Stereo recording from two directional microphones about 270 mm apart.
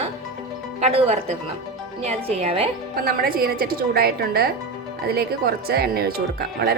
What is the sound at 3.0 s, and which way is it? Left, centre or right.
Speech, right.